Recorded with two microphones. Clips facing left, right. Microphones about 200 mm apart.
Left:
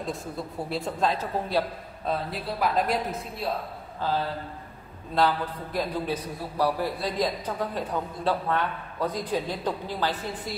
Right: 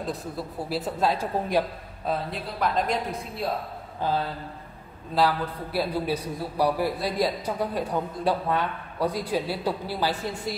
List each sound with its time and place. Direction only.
0.0 s a woman's voice: 5° right (ahead or behind)
2.0 s a woman's voice: 5° left (ahead or behind)
4.0 s a man's voice: 15° right (ahead or behind)